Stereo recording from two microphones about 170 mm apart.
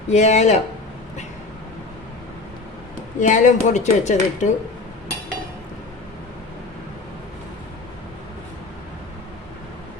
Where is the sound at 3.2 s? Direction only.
45° left (ahead or behind).